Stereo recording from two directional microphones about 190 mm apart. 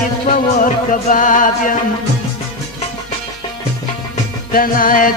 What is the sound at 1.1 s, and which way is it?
Music, 45° left (ahead or behind).